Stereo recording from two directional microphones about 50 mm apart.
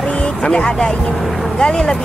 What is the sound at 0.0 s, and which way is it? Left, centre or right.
Vehicle, centre.